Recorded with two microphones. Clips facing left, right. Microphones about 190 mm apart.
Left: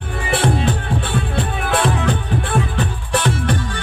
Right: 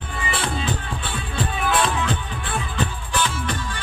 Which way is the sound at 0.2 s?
65° left (ahead or behind).